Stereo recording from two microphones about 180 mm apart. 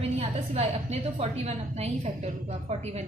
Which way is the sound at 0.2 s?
35° right (ahead or behind).